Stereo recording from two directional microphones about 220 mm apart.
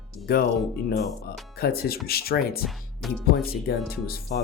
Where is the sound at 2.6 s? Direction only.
Centre (ahead or behind).